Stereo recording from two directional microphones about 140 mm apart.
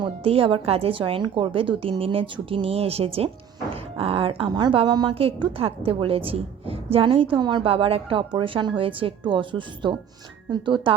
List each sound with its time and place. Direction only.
0.0 s a woman's voice: 40° right (ahead or behind)